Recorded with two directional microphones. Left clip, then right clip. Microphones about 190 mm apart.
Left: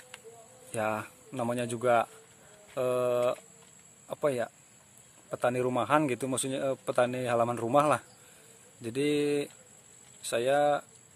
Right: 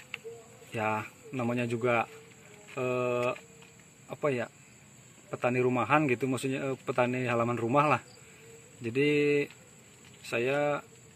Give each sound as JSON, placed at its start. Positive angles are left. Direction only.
{"t": 0.7, "sound": "speech", "side_deg": 60}